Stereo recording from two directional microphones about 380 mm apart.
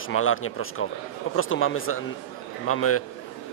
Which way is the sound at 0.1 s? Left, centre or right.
Left.